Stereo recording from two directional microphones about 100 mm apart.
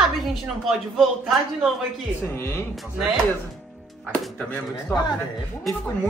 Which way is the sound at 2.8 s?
5° right (ahead or behind).